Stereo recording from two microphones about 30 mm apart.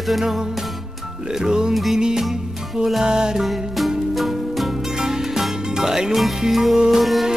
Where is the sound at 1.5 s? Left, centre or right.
Right.